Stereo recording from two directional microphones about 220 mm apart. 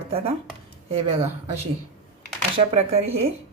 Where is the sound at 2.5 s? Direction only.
30° right (ahead or behind).